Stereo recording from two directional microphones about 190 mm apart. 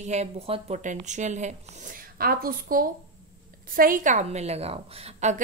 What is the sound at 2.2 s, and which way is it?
A woman's voice, 50° right (ahead or behind).